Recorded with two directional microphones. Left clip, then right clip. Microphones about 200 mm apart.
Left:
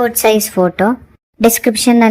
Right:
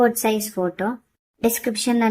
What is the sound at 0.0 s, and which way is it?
A woman's voice, 35° left (ahead or behind).